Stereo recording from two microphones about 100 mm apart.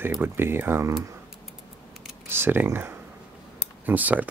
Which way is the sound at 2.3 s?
20° right (ahead or behind).